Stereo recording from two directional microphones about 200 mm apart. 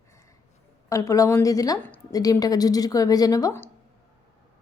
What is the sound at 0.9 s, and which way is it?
A woman's voice, 15° left (ahead or behind).